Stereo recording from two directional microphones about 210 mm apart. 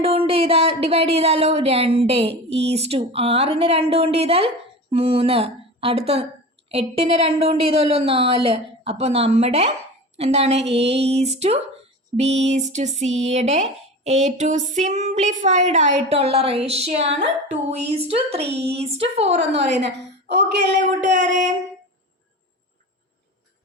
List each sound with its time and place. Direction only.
0.0 s speech: 30° right (ahead or behind)
19.8 s a woman's voice: 55° right (ahead or behind)
20.8 s speech: 35° right (ahead or behind)